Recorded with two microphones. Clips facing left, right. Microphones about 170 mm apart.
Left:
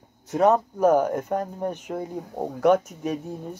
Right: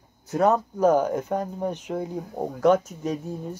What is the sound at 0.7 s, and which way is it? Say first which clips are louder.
Speech: left 1 dB; 10° left (ahead or behind).